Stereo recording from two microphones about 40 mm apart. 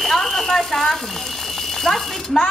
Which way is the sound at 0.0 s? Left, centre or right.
Centre.